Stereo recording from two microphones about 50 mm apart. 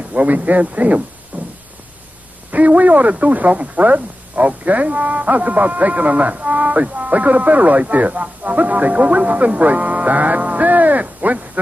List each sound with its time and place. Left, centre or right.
0.1 s speech: right
1.3 s a sound: right
2.5 s speech: right